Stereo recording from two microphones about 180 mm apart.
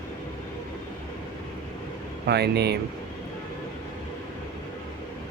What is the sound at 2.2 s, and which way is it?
Speech, 65° right (ahead or behind).